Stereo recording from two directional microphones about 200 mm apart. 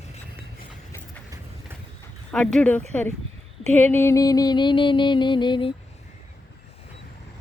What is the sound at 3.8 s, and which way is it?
Music, 10° left (ahead or behind).